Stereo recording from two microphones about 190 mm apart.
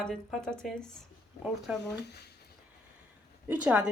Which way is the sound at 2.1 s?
60° left (ahead or behind).